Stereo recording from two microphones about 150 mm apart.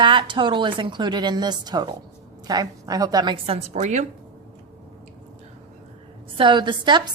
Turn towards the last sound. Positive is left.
turn(degrees=-30)  # may be behind; listen again after turning